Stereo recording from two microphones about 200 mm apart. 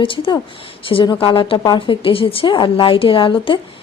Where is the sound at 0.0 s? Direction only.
25° left (ahead or behind).